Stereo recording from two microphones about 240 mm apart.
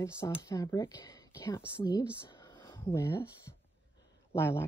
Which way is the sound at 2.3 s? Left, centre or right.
Centre.